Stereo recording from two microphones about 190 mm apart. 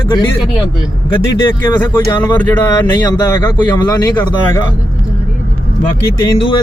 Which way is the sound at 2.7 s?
20° left (ahead or behind).